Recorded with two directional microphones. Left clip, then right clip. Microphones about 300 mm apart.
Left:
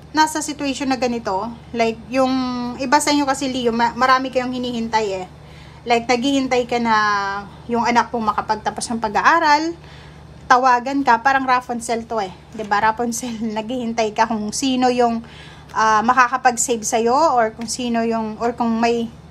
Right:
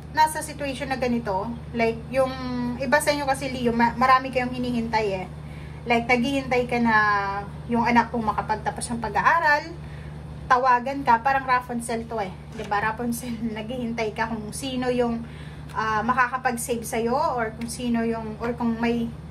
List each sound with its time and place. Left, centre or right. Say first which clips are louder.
0.1 s a woman's voice: left 4 dB; centre